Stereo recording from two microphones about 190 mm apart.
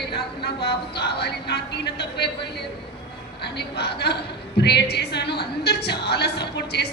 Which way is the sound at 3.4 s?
60° left (ahead or behind).